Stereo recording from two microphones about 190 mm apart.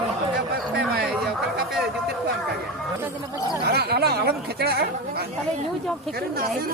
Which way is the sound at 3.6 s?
55° right (ahead or behind).